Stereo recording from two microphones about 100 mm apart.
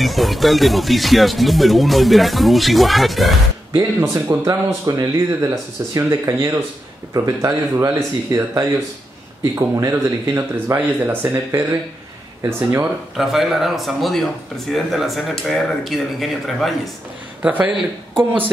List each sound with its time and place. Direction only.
0.0 s speech: centre (ahead or behind)
3.7 s speech: 35° right (ahead or behind)
13.1 s speech: centre (ahead or behind)
17.4 s speech: 15° right (ahead or behind)
18.1 s speech: 60° right (ahead or behind)